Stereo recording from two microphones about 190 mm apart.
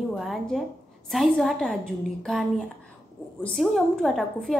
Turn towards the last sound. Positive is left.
turn(degrees=0)  # may be behind; listen again after turning